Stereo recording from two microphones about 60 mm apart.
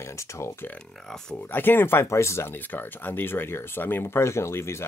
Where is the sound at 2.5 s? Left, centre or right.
Left.